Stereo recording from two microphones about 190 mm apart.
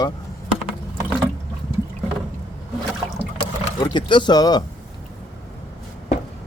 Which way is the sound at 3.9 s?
25° left (ahead or behind).